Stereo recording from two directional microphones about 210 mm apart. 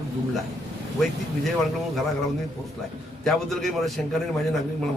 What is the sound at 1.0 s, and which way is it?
A man's voice, centre (ahead or behind).